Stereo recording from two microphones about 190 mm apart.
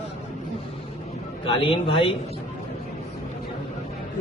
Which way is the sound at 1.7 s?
30° left (ahead or behind).